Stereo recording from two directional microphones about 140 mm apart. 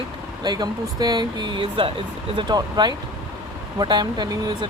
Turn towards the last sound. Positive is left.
turn(degrees=-30)  # may be behind; listen again after turning